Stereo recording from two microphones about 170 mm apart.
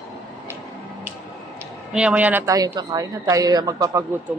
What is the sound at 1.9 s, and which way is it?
A woman's voice, 5° right (ahead or behind).